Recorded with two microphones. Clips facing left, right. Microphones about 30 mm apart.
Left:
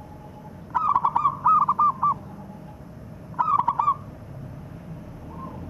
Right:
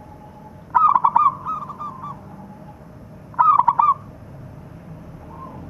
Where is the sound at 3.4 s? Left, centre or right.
Right.